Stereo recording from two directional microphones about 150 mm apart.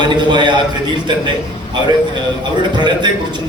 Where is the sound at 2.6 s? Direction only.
30° right (ahead or behind).